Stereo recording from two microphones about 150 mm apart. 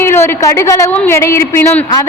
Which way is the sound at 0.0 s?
15° left (ahead or behind).